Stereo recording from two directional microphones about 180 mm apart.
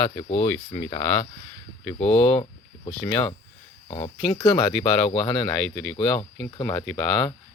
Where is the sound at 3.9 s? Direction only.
30° left (ahead or behind).